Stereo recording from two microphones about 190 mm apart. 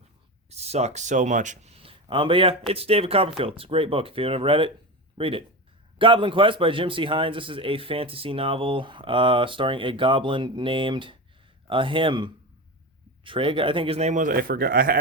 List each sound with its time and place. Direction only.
0.5 s a man's voice: 35° right (ahead or behind); by 14.9 s 50° right (ahead or behind)